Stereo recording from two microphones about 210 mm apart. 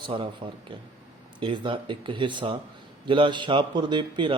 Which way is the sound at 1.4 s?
25° right (ahead or behind).